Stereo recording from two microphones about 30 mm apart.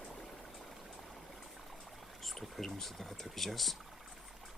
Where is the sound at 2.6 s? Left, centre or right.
Centre.